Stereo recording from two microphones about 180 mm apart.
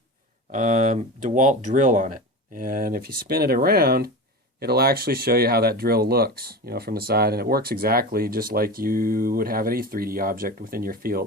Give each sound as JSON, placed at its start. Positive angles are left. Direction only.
{"t": 0.5, "sound": "speech", "side_deg": -45}